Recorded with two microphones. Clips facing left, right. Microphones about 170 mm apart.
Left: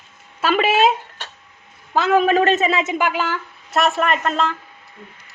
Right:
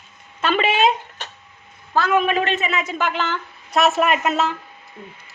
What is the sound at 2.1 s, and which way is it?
Speech, 35° left (ahead or behind).